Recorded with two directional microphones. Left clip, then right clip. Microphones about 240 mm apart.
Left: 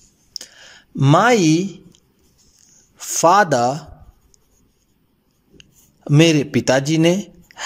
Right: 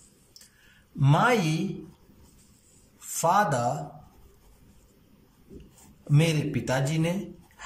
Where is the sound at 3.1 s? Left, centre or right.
Left.